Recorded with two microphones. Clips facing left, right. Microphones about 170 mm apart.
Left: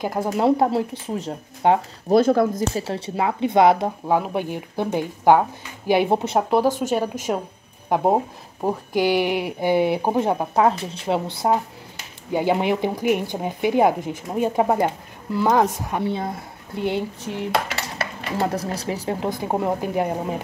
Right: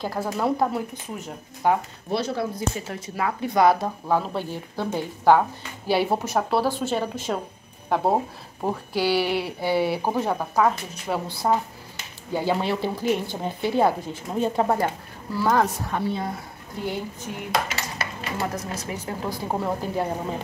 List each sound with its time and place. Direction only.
0.0 s speech: 20° left (ahead or behind)
2.0 s speech: 50° left (ahead or behind)
2.9 s speech: 25° left (ahead or behind)
17.5 s dishes: 65° left (ahead or behind)
18.5 s speech: 35° left (ahead or behind)
19.1 s speech: 20° left (ahead or behind)